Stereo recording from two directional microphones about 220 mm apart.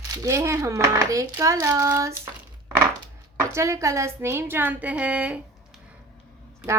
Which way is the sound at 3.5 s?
15° right (ahead or behind).